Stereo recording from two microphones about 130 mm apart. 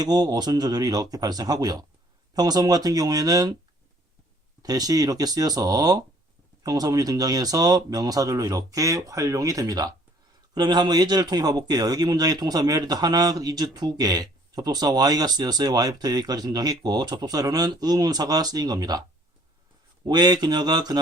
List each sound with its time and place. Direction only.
0.0 s a man's voice: 30° right (ahead or behind)
4.6 s a man's voice: 30° right (ahead or behind)
20.1 s a man's voice: 30° right (ahead or behind)